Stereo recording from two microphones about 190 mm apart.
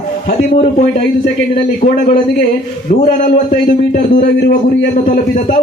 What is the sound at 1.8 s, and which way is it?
Speech, 40° left (ahead or behind).